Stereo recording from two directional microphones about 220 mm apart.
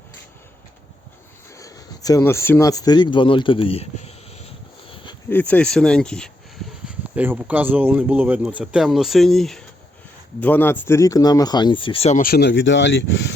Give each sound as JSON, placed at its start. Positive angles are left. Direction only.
{"t": 1.5, "sound": "speech", "side_deg": 15}
{"t": 5.3, "sound": "speech", "side_deg": 5}
{"t": 6.8, "sound": "speech", "side_deg": -5}